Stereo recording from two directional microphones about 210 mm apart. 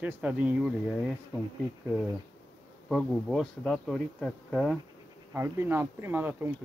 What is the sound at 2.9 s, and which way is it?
Speech, centre (ahead or behind).